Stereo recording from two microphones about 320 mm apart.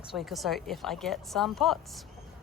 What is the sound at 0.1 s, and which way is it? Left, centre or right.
A woman's voice, centre.